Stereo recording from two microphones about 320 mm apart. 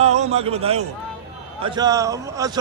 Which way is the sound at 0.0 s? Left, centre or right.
Centre.